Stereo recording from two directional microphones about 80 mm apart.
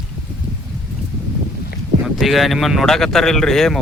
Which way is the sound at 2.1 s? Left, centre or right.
Centre.